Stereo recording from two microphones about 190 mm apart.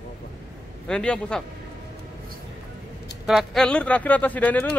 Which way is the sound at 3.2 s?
Centre (ahead or behind).